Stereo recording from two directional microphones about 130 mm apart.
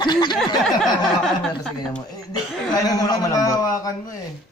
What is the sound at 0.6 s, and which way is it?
Speech, centre (ahead or behind).